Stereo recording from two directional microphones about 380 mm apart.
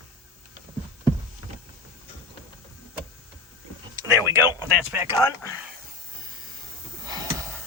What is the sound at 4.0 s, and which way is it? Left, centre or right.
Speech, centre.